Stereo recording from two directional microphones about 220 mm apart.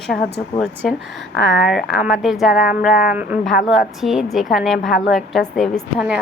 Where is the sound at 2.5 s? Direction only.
40° left (ahead or behind).